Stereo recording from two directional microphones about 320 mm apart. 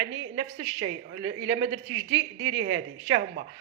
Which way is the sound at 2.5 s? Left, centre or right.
Right.